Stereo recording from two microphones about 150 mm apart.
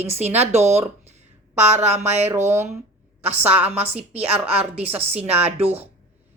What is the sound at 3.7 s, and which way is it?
Speech, 45° right (ahead or behind).